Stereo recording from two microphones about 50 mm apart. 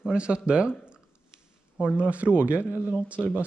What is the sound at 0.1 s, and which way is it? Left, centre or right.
Speech, right.